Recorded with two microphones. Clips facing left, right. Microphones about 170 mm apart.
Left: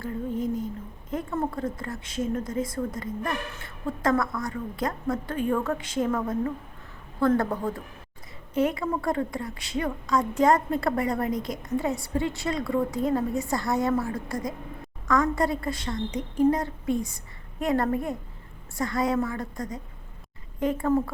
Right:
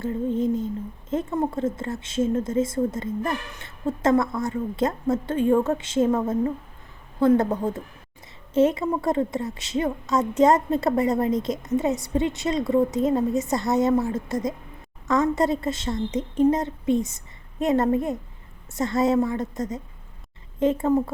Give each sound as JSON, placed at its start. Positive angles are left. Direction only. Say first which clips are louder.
{"t": 0.0, "sound": "a woman's voice", "louder": "right 5 dB", "side_deg": -25}